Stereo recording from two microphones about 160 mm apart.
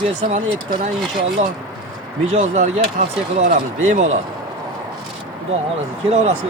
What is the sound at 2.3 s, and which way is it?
Speech, 45° right (ahead or behind).